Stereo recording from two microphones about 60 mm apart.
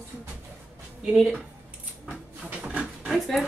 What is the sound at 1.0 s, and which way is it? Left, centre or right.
Speech, centre.